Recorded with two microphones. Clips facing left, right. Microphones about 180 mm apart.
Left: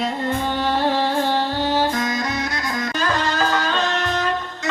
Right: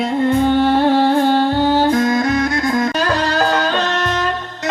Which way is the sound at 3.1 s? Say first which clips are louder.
Right 4 dB; 40° right (ahead or behind).